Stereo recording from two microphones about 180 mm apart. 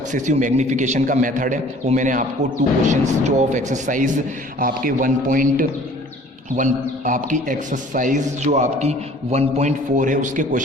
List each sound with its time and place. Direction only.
0.1 s a man's voice: 40° right (ahead or behind)